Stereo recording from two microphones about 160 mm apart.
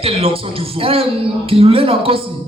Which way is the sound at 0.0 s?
35° right (ahead or behind).